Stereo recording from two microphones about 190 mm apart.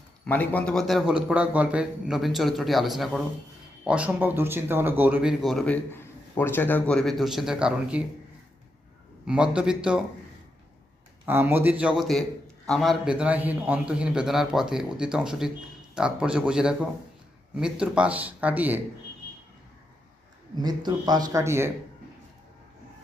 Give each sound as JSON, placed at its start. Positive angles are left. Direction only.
{"t": 0.3, "sound": "speech", "side_deg": 10}
{"t": 9.2, "sound": "speech", "side_deg": -5}
{"t": 11.3, "sound": "speech", "side_deg": -10}
{"t": 20.6, "sound": "speech", "side_deg": -20}